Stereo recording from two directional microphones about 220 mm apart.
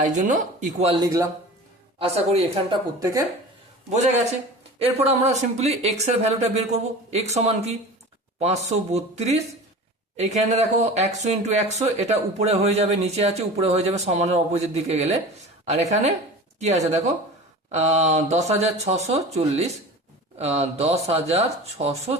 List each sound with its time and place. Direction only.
0.0 s speech: 35° right (ahead or behind)
2.0 s speech: 25° right (ahead or behind)
3.0 s speech: 15° right (ahead or behind)
3.8 s speech: 30° right (ahead or behind)